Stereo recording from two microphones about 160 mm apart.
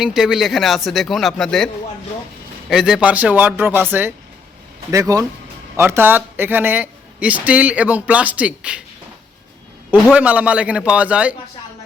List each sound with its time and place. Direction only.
0.0 s speech: 5° right (ahead or behind)
9.9 s speech: 10° right (ahead or behind)